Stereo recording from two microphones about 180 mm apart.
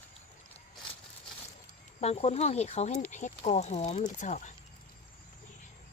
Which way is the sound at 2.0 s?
35° left (ahead or behind).